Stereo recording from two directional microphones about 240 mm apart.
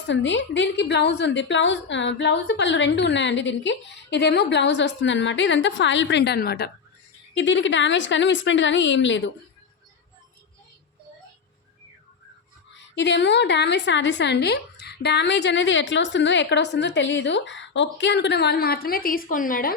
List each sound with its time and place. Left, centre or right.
0.1 s a woman's voice: left
13.0 s a woman's voice: left